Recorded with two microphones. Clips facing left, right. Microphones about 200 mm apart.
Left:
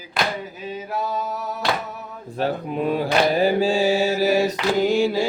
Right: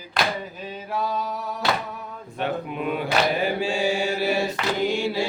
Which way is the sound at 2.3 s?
35° left (ahead or behind).